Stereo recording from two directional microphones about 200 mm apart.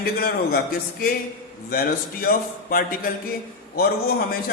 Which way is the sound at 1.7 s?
50° left (ahead or behind).